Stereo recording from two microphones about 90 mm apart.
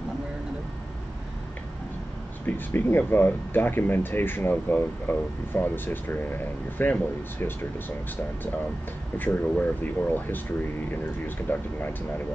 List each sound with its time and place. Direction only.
2.4 s speech: 25° left (ahead or behind)
9.2 s speech: 20° left (ahead or behind)
11.5 s speech: 20° left (ahead or behind)